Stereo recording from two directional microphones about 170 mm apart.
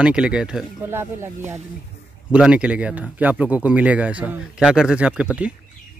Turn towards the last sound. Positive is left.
turn(degrees=-5)  # may be behind; listen again after turning